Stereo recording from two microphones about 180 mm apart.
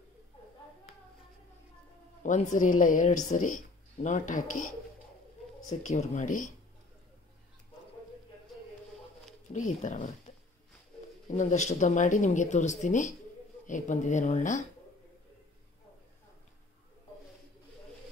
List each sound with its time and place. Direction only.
2.2 s speech: 45° left (ahead or behind)
5.7 s speech: 40° left (ahead or behind)
9.5 s speech: 40° left (ahead or behind)